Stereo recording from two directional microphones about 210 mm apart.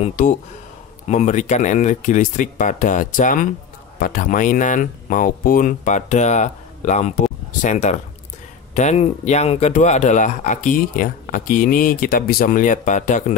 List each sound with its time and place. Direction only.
0.0 s speech: 35° left (ahead or behind)